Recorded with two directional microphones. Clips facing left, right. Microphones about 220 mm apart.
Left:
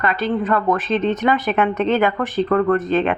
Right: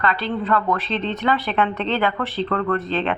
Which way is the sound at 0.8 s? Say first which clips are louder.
Left 6 dB; 45° left (ahead or behind).